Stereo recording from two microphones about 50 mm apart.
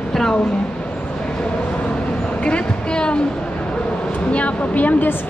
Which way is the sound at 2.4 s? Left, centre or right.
Centre.